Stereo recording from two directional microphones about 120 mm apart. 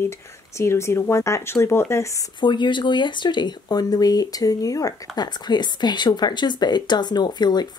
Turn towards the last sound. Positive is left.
turn(degrees=35)  # may be behind; listen again after turning